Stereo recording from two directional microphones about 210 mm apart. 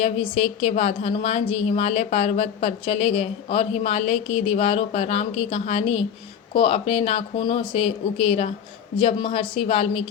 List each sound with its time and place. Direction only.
0.0 s a woman's voice: 30° left (ahead or behind)